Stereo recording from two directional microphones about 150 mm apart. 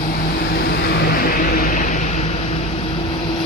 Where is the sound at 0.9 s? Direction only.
90° left; by 2.6 s 50° left (ahead or behind).